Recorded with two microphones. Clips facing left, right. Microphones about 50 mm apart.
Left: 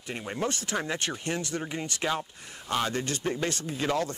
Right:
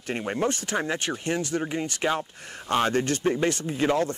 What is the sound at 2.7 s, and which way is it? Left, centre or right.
Speech, right.